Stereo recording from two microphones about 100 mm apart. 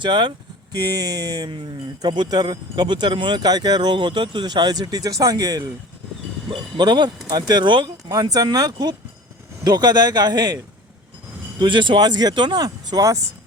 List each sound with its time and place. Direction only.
0.0 s speech: 50° right (ahead or behind)
6.5 s speech: 50° right (ahead or behind)
8.1 s speech: 40° right (ahead or behind)
11.6 s speech: 55° right (ahead or behind); by 13.2 s 35° right (ahead or behind)